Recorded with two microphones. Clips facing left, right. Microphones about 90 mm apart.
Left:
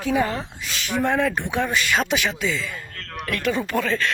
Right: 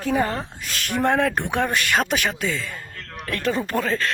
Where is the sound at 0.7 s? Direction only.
50° right (ahead or behind).